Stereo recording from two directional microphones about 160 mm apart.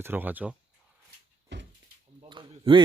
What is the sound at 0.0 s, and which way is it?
Speech, 10° right (ahead or behind).